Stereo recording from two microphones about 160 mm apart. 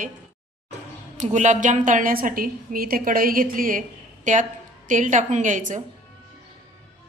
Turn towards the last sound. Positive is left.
turn(degrees=-50)  # may be behind; listen again after turning